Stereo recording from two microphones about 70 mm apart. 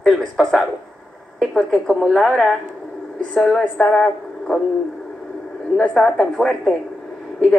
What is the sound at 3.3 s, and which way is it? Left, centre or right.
Speech, centre.